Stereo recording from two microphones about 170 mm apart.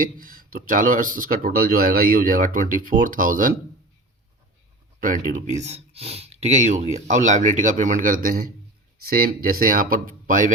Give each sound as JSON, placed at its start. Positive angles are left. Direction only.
{"t": 0.0, "sound": "speech", "side_deg": -55}
{"t": 4.9, "sound": "speech", "side_deg": -55}